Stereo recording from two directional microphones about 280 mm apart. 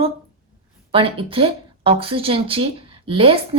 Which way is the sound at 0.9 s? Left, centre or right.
Centre.